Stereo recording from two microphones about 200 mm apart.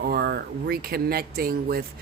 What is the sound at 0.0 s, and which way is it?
Speech, 50° right (ahead or behind).